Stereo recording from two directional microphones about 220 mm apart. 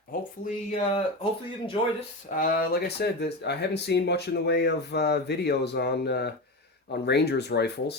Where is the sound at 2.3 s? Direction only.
40° left (ahead or behind).